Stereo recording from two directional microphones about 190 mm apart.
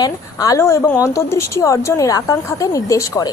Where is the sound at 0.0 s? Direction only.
20° left (ahead or behind).